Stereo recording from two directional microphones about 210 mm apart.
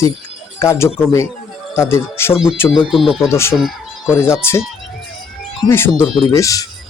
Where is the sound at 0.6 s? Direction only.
15° left (ahead or behind).